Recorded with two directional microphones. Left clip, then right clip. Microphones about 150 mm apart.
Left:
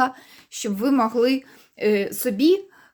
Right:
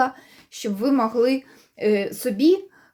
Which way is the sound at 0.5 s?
30° left (ahead or behind).